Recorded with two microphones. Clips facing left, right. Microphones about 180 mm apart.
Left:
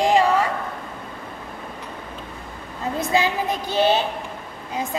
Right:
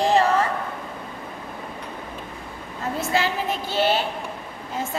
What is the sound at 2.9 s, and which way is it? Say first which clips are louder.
A woman's voice: left 3 dB; 15° left (ahead or behind).